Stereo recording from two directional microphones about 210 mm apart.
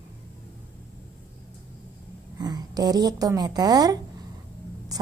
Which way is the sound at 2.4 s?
20° right (ahead or behind).